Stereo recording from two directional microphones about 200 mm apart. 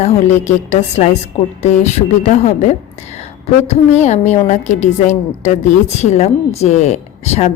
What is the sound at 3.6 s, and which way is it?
A woman's voice, 35° left (ahead or behind).